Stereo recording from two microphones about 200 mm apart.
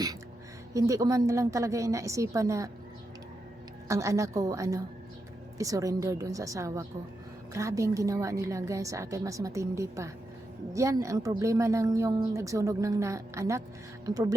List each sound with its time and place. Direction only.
0.7 s speech: 15° right (ahead or behind)
3.8 s speech: 15° right (ahead or behind)